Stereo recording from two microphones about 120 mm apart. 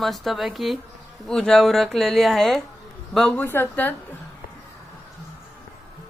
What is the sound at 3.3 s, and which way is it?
Speech, 20° left (ahead or behind).